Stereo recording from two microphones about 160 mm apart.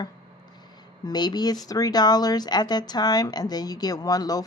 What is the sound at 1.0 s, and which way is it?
Speech, 25° left (ahead or behind).